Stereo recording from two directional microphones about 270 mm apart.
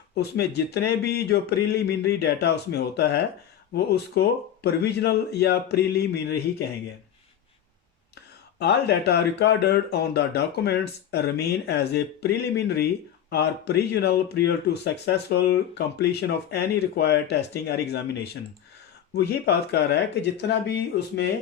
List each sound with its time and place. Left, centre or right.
0.1 s speech: left
8.5 s speech: left